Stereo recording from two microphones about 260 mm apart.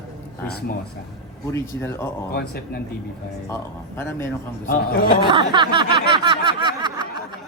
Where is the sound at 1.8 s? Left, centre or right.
Centre.